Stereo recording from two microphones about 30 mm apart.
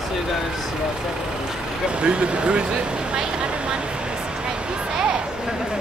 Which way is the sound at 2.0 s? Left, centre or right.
Right.